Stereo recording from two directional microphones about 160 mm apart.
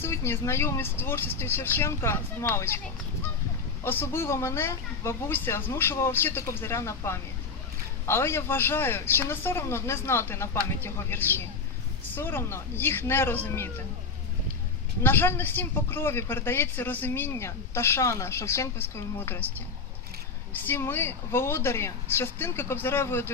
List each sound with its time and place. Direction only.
0.0 s speech: 15° left (ahead or behind)
3.8 s speech: 15° left (ahead or behind)
15.0 s speech: 15° left (ahead or behind)
20.5 s speech: 15° left (ahead or behind)